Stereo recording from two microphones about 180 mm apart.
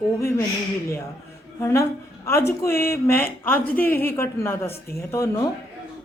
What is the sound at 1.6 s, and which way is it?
A man's voice, 15° left (ahead or behind).